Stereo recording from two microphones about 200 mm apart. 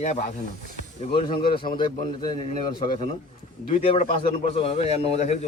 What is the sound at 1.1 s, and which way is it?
A man's voice, 25° left (ahead or behind).